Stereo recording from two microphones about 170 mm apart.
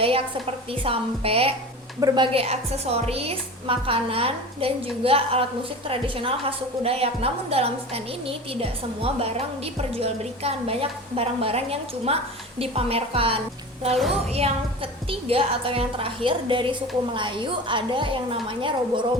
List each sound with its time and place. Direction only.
0.0 s a woman's voice: 35° right (ahead or behind)
2.0 s a woman's voice: 25° right (ahead or behind)
13.9 s a woman's voice: centre (ahead or behind)
14.3 s a woman's voice: 35° right (ahead or behind)